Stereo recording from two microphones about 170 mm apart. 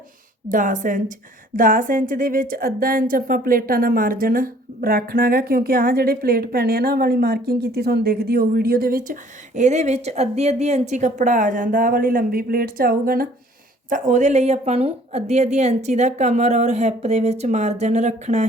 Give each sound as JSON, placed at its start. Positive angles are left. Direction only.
{"t": 0.4, "sound": "a woman's voice", "side_deg": -50}
{"t": 9.6, "sound": "a woman's voice", "side_deg": -40}
{"t": 13.9, "sound": "a woman's voice", "side_deg": -45}